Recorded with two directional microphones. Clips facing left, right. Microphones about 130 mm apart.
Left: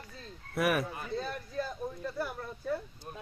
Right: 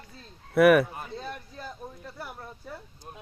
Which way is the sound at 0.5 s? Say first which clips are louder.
Right 11 dB; 65° right (ahead or behind).